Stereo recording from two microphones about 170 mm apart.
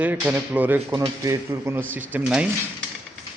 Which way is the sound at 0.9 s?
20° right (ahead or behind).